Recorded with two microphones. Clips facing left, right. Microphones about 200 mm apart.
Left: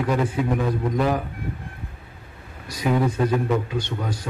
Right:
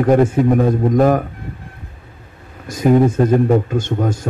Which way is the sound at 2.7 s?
45° right (ahead or behind).